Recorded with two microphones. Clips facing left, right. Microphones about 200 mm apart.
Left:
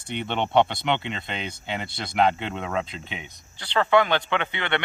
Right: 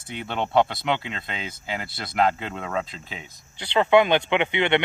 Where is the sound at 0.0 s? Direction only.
Centre (ahead or behind).